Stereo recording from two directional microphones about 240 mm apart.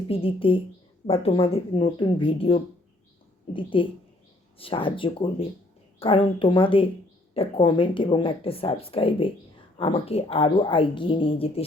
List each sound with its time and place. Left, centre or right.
0.1 s speech: left